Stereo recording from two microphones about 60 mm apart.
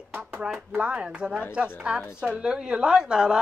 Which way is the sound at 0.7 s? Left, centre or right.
Centre.